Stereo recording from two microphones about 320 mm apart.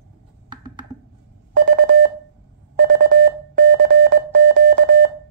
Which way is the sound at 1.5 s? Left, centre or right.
Right.